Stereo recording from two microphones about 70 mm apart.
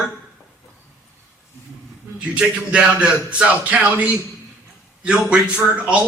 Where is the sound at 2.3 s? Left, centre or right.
Centre.